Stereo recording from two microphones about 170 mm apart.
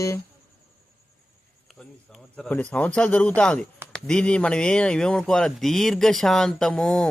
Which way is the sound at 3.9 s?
5° left (ahead or behind).